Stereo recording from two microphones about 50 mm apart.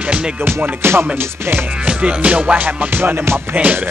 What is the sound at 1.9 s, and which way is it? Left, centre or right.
Music, right.